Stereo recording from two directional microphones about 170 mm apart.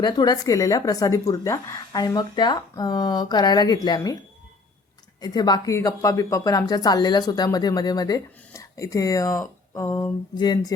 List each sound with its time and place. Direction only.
0.0 s speech: 25° left (ahead or behind)
5.2 s speech: 25° left (ahead or behind)